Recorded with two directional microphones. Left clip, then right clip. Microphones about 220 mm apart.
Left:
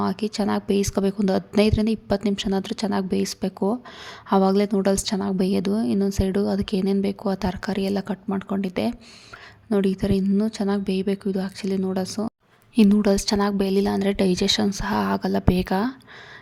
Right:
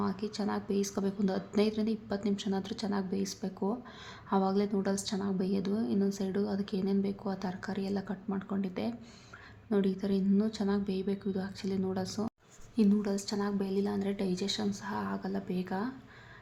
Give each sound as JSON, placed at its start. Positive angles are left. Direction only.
{"t": 0.0, "sound": "a woman's voice", "side_deg": 40}